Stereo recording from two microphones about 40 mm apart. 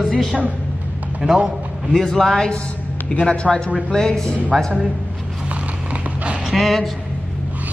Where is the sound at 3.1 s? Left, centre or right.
Left.